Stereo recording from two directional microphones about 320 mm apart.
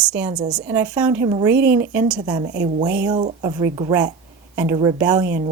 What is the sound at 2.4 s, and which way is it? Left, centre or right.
Speech, right.